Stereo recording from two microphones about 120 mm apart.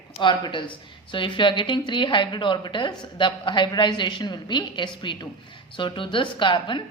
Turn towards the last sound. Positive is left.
turn(degrees=40)  # may be behind; listen again after turning